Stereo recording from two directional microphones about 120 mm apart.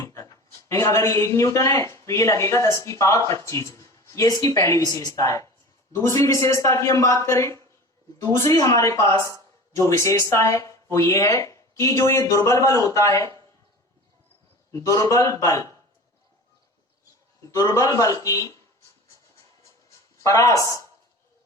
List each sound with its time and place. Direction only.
0.1 s speech: 25° left (ahead or behind)
14.7 s speech: 25° left (ahead or behind)
17.5 s speech: 30° left (ahead or behind)
19.1 s music: 25° left (ahead or behind)